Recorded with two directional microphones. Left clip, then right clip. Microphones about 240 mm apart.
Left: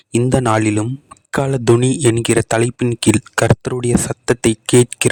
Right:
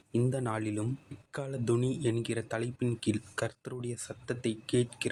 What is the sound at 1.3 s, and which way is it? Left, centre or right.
Speech, left.